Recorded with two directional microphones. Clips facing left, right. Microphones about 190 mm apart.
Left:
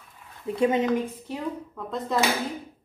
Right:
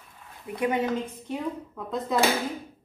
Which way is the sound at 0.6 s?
25° left (ahead or behind).